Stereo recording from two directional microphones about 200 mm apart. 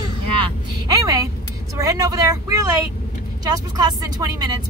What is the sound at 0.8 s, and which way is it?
Speech, 20° right (ahead or behind).